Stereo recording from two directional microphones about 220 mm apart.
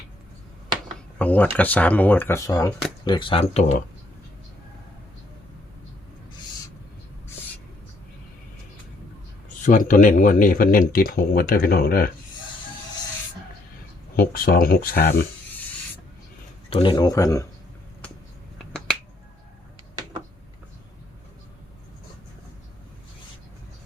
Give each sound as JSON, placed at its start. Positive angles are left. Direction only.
{"t": 1.2, "sound": "speech", "side_deg": 5}
{"t": 9.6, "sound": "speech", "side_deg": 35}
{"t": 14.2, "sound": "speech", "side_deg": 40}
{"t": 16.6, "sound": "speech", "side_deg": 25}